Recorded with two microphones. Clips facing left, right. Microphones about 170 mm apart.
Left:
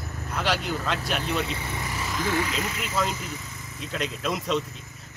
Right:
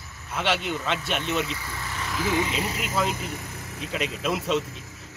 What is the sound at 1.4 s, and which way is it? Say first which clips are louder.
Speech: left 2 dB; 25° left (ahead or behind).